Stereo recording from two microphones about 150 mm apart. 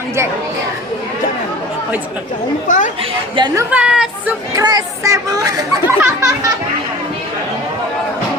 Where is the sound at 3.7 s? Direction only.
5° right (ahead or behind).